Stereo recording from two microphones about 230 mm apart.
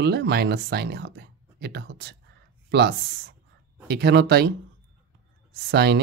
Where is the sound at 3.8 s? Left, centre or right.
Right.